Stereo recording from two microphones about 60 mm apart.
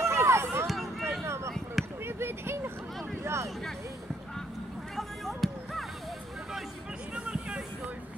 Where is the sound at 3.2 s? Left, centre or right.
Right.